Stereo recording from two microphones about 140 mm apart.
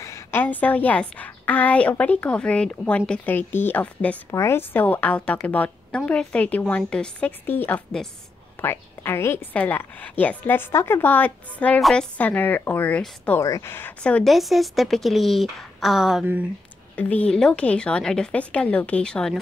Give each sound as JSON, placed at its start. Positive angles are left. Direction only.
{"t": 0.0, "sound": "a woman's voice", "side_deg": 20}
{"t": 13.4, "sound": "speech", "side_deg": 20}
{"t": 16.9, "sound": "a woman's voice", "side_deg": 10}